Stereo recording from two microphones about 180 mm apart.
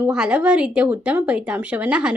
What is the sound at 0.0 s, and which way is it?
A woman's voice, 5° right (ahead or behind).